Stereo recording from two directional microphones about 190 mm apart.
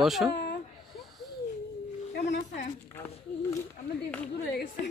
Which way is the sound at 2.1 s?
55° left (ahead or behind).